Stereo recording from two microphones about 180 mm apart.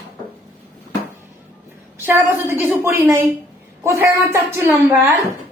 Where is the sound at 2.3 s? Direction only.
15° right (ahead or behind).